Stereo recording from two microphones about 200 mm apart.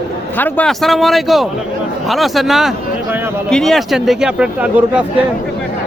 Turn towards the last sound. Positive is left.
turn(degrees=-5)  # may be behind; listen again after turning